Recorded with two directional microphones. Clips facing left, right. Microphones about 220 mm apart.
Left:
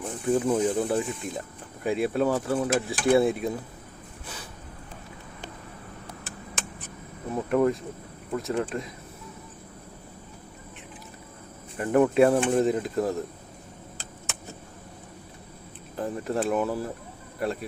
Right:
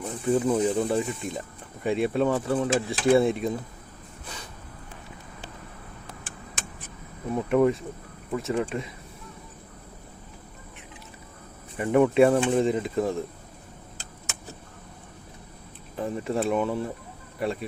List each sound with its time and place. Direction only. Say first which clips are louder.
0.0 s speech: right 1 dB; centre (ahead or behind)
7.3 s speech: right 2 dB; centre (ahead or behind)
11.8 s speech: right 1 dB; centre (ahead or behind)
16.0 s speech: right 1 dB; centre (ahead or behind)